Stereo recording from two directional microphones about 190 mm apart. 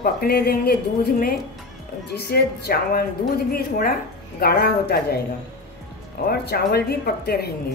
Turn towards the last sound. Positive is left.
turn(degrees=55)  # may be behind; listen again after turning